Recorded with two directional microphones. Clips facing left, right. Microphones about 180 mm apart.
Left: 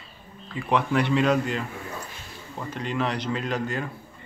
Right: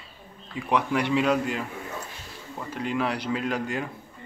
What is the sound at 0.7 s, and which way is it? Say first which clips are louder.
Speech: left 1 dB; 10° right (ahead or behind).